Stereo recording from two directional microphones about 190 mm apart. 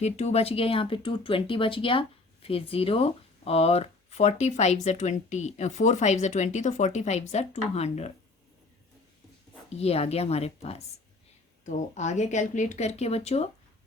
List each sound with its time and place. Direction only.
0.0 s speech: 35° left (ahead or behind)
9.6 s speech: 35° left (ahead or behind)